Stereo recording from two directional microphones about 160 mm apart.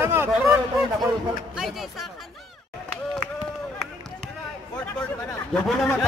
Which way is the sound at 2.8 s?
5° left (ahead or behind).